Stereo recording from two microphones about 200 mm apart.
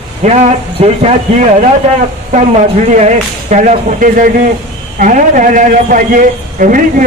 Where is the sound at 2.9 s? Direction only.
35° right (ahead or behind).